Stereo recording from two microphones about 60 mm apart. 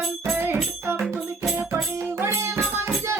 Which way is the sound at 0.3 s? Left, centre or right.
Right.